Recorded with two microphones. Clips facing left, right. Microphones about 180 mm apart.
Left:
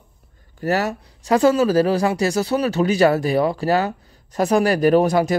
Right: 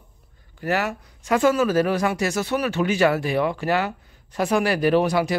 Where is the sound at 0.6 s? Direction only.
40° left (ahead or behind).